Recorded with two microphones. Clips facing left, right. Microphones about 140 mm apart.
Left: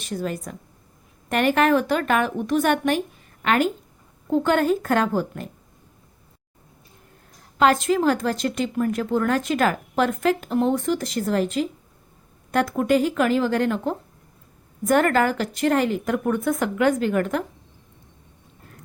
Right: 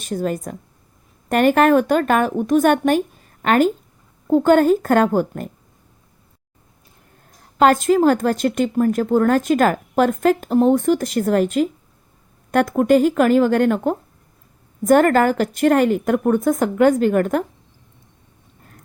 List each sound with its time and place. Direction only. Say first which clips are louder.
0.0 s a woman's voice: right 5 dB; 45° right (ahead or behind)
7.6 s speech: right 5 dB; 45° right (ahead or behind)